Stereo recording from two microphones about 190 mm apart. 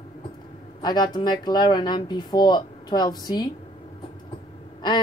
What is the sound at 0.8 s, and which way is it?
Speech, 20° left (ahead or behind).